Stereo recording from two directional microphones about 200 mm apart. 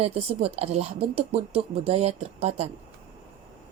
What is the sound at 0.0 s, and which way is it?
Speech, 30° right (ahead or behind).